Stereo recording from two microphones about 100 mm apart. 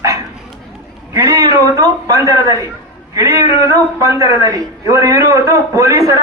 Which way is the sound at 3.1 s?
35° right (ahead or behind).